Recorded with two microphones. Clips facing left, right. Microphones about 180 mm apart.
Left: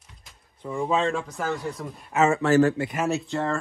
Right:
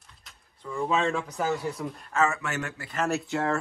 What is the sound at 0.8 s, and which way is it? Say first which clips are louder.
Speech: left 2 dB; centre (ahead or behind).